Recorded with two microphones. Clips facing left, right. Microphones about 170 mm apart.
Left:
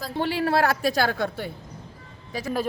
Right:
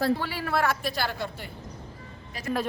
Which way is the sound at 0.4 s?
35° left (ahead or behind).